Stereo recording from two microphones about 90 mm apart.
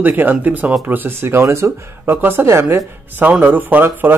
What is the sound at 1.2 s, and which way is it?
Speech, 30° right (ahead or behind).